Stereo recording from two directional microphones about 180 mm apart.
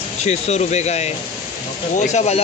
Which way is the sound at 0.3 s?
40° left (ahead or behind).